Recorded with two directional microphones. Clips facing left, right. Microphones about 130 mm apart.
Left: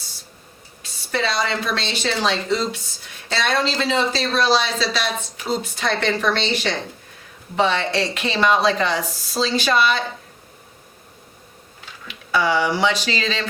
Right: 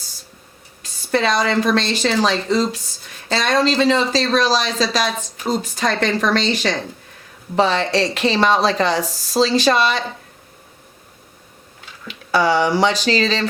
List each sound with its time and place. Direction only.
0.8 s speech: 45° right (ahead or behind)
7.5 s speech: 35° right (ahead or behind)
12.3 s speech: 35° right (ahead or behind)